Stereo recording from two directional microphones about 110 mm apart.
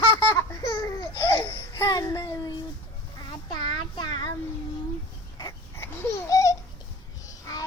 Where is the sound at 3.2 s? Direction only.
40° left (ahead or behind).